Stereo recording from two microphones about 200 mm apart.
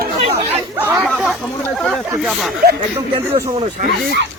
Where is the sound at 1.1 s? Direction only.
Centre (ahead or behind).